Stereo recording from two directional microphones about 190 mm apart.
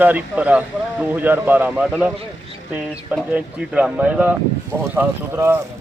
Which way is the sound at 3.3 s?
5° right (ahead or behind).